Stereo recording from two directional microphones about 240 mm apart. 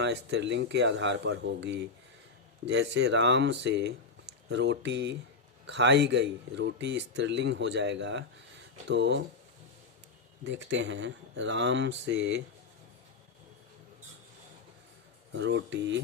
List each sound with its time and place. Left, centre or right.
0.0 s speech: right
10.4 s speech: right
15.4 s speech: right